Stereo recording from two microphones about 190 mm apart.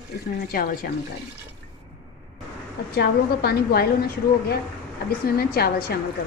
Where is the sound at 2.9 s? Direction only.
55° left (ahead or behind).